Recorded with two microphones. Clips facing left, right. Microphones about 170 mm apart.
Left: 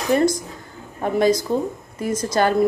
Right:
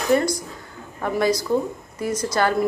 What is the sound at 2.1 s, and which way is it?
Speech, 50° left (ahead or behind).